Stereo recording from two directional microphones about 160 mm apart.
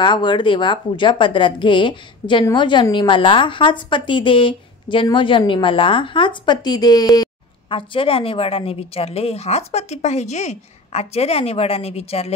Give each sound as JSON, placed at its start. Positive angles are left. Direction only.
{"t": 0.0, "sound": "a woman's voice", "side_deg": 30}